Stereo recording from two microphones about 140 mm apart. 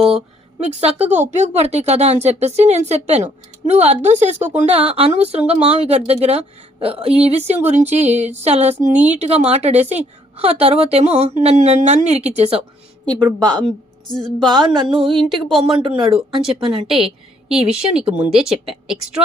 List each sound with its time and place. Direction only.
0.6 s a woman's voice: 50° right (ahead or behind)
13.1 s a woman's voice: 30° right (ahead or behind)
14.3 s music: 30° right (ahead or behind)
16.4 s speech: 5° right (ahead or behind)
17.5 s a woman's voice: 45° right (ahead or behind)
17.9 s speech: 5° right (ahead or behind)
18.5 s a woman's voice: 45° right (ahead or behind)